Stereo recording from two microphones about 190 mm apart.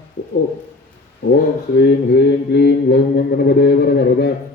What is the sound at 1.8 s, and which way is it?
Mantra, 60° left (ahead or behind).